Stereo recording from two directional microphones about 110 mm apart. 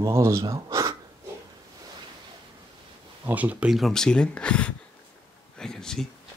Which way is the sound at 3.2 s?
15° right (ahead or behind).